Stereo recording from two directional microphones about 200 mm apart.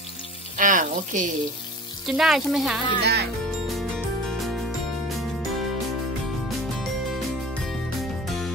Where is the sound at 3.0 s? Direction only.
55° right (ahead or behind).